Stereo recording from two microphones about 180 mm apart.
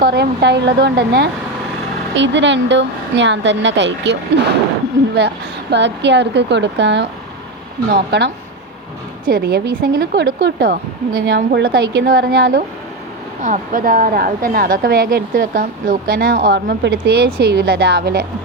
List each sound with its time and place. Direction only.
0.0 s speech: 65° right (ahead or behind)
2.1 s a woman's voice: 85° right
5.7 s speech: 75° right (ahead or behind)
9.3 s a woman's voice: 65° right (ahead or behind)
13.4 s a woman's voice: 45° right (ahead or behind)